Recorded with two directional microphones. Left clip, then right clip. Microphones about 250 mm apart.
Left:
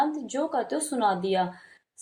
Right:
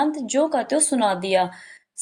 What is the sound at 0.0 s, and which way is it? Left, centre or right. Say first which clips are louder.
A woman's voice: right 6 dB; right.